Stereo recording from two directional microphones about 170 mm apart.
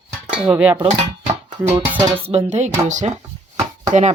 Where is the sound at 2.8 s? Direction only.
45° right (ahead or behind).